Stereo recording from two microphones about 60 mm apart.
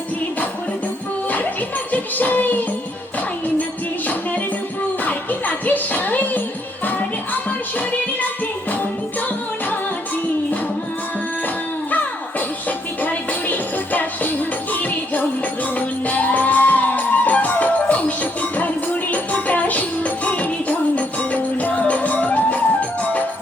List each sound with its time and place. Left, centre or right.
1.9 s music: left
4.0 s music: left
11.4 s music: left